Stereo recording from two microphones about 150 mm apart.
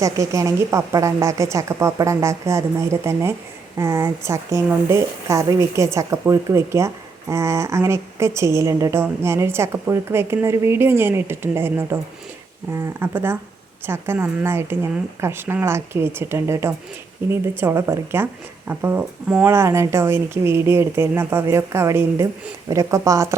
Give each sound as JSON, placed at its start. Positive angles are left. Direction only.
{"t": 0.0, "sound": "a woman's voice", "side_deg": -20}